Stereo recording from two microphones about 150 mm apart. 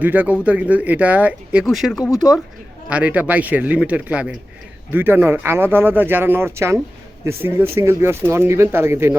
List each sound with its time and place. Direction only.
0.0 s speech: 10° right (ahead or behind)